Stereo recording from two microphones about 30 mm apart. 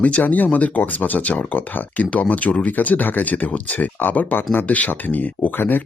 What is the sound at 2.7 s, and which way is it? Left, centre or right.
Speech, left.